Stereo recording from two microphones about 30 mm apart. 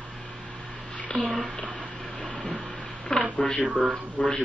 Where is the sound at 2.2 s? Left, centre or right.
Left.